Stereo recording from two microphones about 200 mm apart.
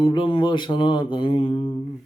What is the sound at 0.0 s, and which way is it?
Speech, 25° left (ahead or behind).